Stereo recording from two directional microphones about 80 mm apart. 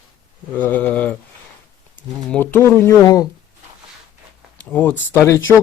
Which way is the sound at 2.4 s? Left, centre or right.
Left.